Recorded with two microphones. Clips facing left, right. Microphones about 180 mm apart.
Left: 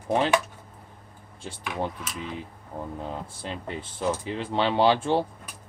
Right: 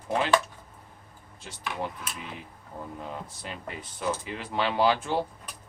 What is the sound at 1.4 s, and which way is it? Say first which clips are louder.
Speech: left 3 dB; 30° left (ahead or behind).